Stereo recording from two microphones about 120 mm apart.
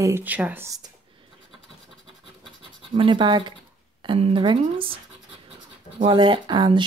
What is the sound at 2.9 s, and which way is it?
Speech, 45° right (ahead or behind).